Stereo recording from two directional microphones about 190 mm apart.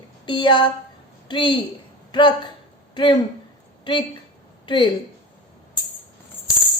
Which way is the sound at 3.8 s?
25° left (ahead or behind).